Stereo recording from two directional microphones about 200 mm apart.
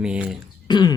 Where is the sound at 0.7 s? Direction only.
20° left (ahead or behind).